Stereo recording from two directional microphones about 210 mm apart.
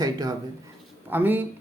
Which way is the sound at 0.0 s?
15° right (ahead or behind).